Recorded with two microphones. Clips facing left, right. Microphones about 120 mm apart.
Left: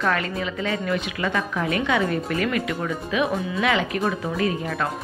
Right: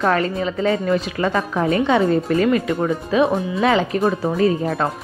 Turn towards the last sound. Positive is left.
turn(degrees=-30)  # may be behind; listen again after turning